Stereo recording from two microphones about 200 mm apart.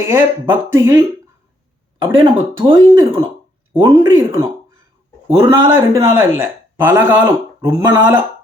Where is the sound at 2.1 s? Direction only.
25° right (ahead or behind).